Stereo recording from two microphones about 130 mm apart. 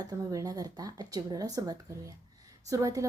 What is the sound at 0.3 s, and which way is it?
A woman's voice, 30° right (ahead or behind).